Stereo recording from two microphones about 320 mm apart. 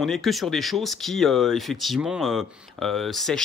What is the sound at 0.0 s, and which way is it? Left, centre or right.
Speech, centre.